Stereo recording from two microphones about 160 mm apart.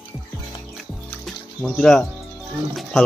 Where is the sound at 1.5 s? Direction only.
Centre (ahead or behind).